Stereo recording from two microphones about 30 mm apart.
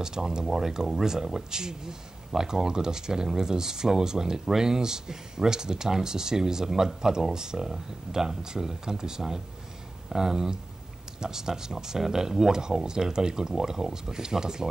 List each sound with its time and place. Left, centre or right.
0.0 s speech: right
0.5 s speech: centre